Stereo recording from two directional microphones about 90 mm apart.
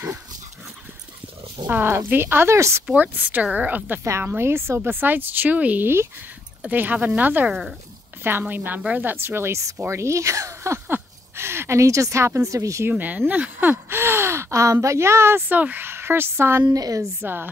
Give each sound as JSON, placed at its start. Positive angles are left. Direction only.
{"t": 0.0, "sound": "dog", "side_deg": -35}
{"t": 1.7, "sound": "speech", "side_deg": -25}
{"t": 2.9, "sound": "speech", "side_deg": -20}
{"t": 4.0, "sound": "speech", "side_deg": -30}
{"t": 7.4, "sound": "speech", "side_deg": -5}
{"t": 8.2, "sound": "speech", "side_deg": -25}
{"t": 10.9, "sound": "a sound", "side_deg": -25}
{"t": 12.9, "sound": "speech", "side_deg": -15}
{"t": 16.6, "sound": "speech", "side_deg": -45}
{"t": 17.2, "sound": "speech", "side_deg": -25}